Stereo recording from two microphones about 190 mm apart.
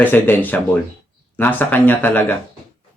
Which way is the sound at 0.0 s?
10° left (ahead or behind).